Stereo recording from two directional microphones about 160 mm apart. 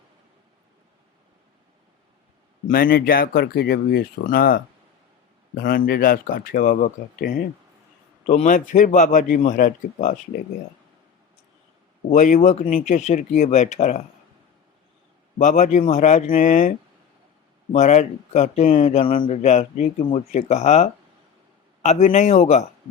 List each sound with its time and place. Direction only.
2.6 s speech: 65° left (ahead or behind)
5.6 s speech: 65° left (ahead or behind)
12.1 s speech: 50° left (ahead or behind)
15.4 s speech: 50° left (ahead or behind)